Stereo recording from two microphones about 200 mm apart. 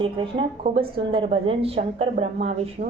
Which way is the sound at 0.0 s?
25° right (ahead or behind).